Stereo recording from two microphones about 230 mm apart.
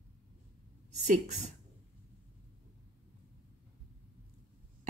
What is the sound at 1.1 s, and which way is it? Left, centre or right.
Speech, right.